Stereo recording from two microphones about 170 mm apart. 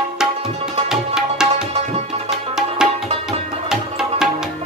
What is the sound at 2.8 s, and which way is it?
Music, 5° right (ahead or behind).